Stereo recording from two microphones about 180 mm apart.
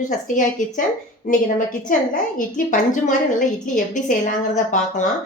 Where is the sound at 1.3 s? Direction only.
45° left (ahead or behind).